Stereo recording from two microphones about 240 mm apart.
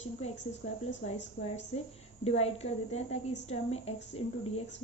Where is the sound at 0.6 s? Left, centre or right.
Left.